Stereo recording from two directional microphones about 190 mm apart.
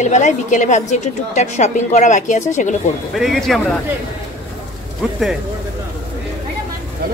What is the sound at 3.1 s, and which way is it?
Speech, centre (ahead or behind).